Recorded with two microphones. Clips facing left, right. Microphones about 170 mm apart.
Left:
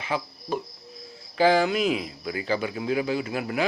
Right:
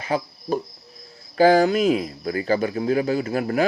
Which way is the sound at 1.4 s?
45° right (ahead or behind).